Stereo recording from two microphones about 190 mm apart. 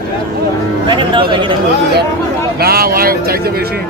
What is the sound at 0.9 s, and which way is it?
Speech, 25° right (ahead or behind).